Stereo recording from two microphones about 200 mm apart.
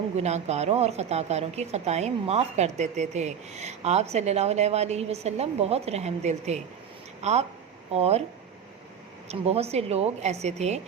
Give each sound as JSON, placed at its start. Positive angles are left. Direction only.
{"t": 0.2, "sound": "a woman's voice", "side_deg": -35}
{"t": 9.3, "sound": "a woman's voice", "side_deg": -30}